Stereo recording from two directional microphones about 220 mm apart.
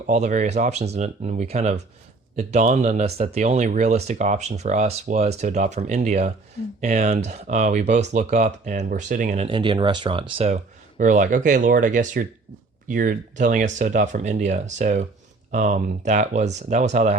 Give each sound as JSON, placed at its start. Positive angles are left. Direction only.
{"t": 0.1, "sound": "speech", "side_deg": -35}